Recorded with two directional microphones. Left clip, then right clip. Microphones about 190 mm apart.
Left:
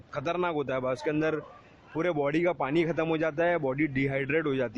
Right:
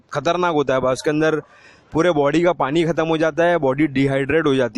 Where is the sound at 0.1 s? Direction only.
50° right (ahead or behind).